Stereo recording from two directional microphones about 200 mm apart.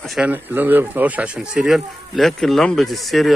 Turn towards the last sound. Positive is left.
turn(degrees=0)  # may be behind; listen again after turning